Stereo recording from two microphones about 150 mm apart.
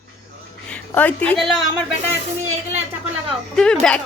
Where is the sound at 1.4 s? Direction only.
Centre (ahead or behind).